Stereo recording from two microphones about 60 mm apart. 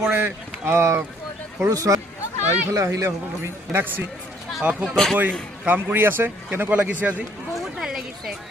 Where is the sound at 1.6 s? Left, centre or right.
Right.